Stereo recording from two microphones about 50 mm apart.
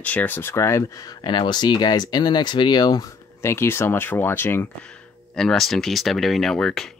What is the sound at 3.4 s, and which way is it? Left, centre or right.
Speech, left.